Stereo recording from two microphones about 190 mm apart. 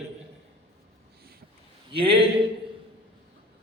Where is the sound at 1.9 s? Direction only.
30° right (ahead or behind).